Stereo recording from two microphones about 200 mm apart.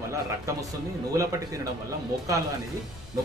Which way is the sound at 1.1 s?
15° right (ahead or behind).